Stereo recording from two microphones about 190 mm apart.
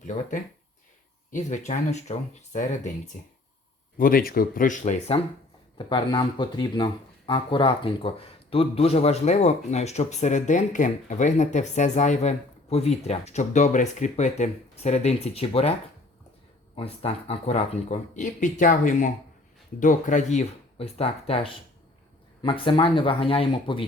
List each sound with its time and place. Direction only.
0.0 s speech: 40° left (ahead or behind)
3.9 s speech: 50° left (ahead or behind); by 15.7 s 30° left (ahead or behind)
16.7 s speech: 30° left (ahead or behind)